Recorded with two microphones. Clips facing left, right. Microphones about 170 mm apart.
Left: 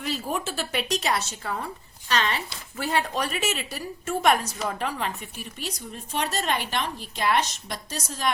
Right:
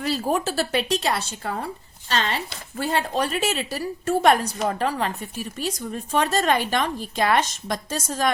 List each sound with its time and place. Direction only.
0.3 s speech: 35° right (ahead or behind)
1.5 s a woman's voice: 50° right (ahead or behind)
2.0 s speech: 30° right (ahead or behind)
6.1 s a woman's voice: 90° right
6.5 s a woman's voice: 45° right (ahead or behind)
7.2 s a woman's voice: 90° right
8.0 s a woman's voice: 50° right (ahead or behind)